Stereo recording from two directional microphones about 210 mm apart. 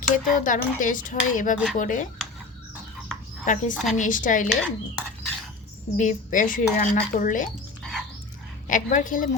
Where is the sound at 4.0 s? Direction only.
40° left (ahead or behind).